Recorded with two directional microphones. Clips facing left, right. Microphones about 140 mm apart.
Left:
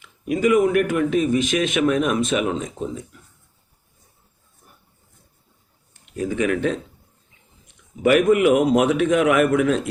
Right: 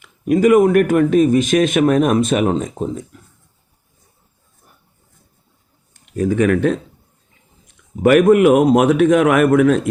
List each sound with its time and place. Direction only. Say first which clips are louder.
0.0 s speech: right 6 dB; 45° right (ahead or behind)
5.9 s speech: right 7 dB; 45° right (ahead or behind)
8.3 s speech: right 5 dB; 50° right (ahead or behind)